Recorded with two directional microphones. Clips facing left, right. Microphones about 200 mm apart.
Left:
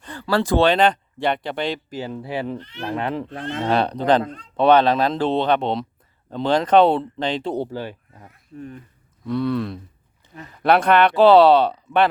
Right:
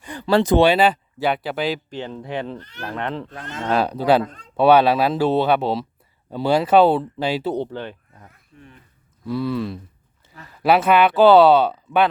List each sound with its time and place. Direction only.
0.0 s speech: 15° right (ahead or behind)
0.7 s speech: 5° right (ahead or behind)
1.9 s speech: 5° left (ahead or behind)
2.6 s speech: 40° right (ahead or behind)
2.9 s speech: 15° left (ahead or behind)
3.2 s speech: 25° left (ahead or behind)
3.6 s speech: centre (ahead or behind)
7.6 s speech: 10° left (ahead or behind)
8.5 s speech: 40° left (ahead or behind)
9.2 s speech: 5° right (ahead or behind)
10.2 s a sound: 15° left (ahead or behind)
10.6 s speech: 5° right (ahead or behind)